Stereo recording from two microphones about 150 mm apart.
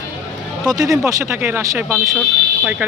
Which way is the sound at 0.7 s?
25° right (ahead or behind).